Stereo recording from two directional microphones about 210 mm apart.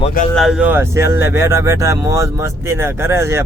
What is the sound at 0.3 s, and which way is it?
Speech, centre (ahead or behind).